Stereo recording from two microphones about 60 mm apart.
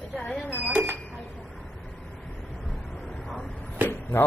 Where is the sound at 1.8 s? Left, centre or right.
Centre.